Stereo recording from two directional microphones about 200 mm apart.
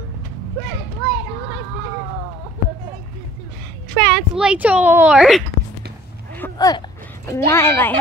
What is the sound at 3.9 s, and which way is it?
Speech, 5° left (ahead or behind).